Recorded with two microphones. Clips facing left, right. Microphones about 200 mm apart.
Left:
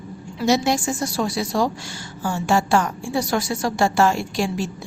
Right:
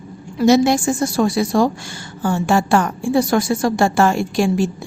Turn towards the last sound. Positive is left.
turn(degrees=-50)  # may be behind; listen again after turning